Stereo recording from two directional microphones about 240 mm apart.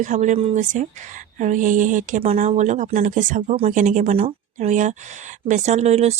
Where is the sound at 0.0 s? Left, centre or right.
Right.